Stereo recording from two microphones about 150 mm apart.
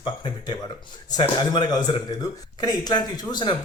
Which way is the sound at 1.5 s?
30° left (ahead or behind).